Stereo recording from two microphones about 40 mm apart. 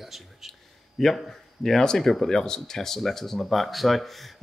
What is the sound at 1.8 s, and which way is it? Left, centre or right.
Speech, centre.